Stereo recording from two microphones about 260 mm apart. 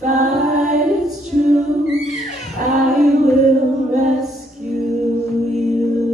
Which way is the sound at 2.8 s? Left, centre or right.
Centre.